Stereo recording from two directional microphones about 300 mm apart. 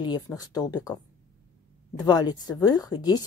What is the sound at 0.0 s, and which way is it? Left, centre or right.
Speech, centre.